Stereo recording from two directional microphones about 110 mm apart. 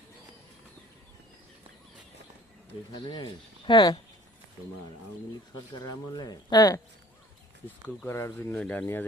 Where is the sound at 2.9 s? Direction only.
45° left (ahead or behind).